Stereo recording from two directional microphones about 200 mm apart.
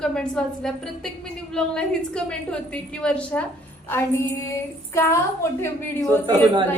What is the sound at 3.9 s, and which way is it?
Female singing, 15° left (ahead or behind).